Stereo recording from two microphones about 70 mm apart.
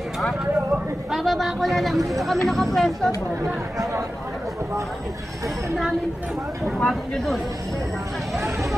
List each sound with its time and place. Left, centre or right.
1.1 s speech: centre
3.7 s speech: right
6.8 s speech: centre